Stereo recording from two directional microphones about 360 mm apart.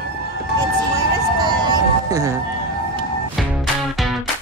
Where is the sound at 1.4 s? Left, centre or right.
Centre.